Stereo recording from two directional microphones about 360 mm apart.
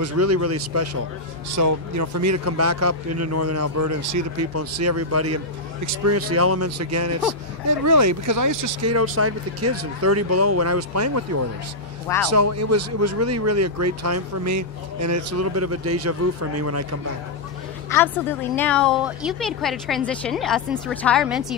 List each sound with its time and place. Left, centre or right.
0.0 s speech: right
1.5 s speech: right
17.8 s a woman's voice: centre